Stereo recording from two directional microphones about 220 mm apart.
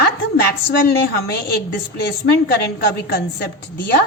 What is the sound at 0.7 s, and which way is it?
A woman's voice, 45° left (ahead or behind).